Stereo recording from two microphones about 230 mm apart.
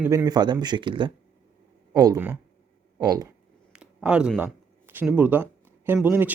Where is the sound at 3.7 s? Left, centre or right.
Centre.